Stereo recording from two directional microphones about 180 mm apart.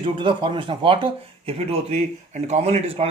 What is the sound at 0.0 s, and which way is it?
Speech, 30° right (ahead or behind).